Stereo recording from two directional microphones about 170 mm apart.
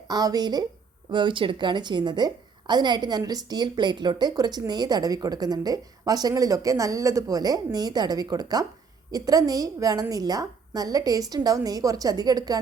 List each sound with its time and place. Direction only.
0.1 s a woman's voice: 25° right (ahead or behind)